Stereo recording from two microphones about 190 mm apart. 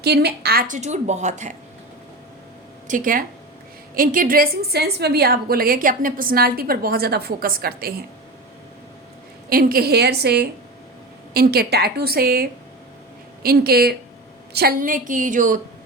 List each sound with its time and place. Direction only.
0.0 s a woman's voice: 60° right (ahead or behind)
0.7 s a woman's voice: 40° right (ahead or behind)
2.8 s a woman's voice: 45° right (ahead or behind)
9.5 s a woman's voice: 50° right (ahead or behind)